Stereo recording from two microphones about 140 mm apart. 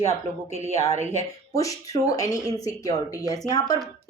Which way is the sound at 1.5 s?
25° left (ahead or behind).